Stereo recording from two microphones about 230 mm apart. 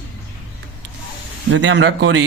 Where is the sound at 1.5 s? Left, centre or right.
Right.